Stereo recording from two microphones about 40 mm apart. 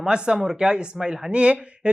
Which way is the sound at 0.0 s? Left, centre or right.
Right.